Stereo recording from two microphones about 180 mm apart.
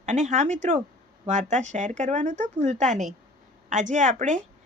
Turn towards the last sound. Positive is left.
turn(degrees=-45)  # may be behind; listen again after turning